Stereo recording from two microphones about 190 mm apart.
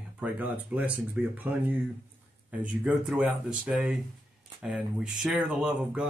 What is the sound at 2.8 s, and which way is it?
Speech, 5° right (ahead or behind).